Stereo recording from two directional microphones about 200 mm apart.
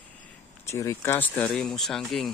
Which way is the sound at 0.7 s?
15° left (ahead or behind).